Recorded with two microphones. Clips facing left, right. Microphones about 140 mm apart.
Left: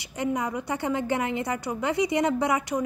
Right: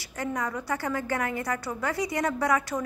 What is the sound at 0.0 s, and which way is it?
A woman's voice, 20° left (ahead or behind).